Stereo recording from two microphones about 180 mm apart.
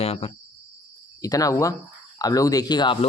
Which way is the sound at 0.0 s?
35° left (ahead or behind).